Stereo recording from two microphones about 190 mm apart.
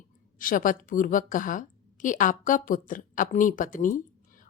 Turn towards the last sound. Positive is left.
turn(degrees=45)  # may be behind; listen again after turning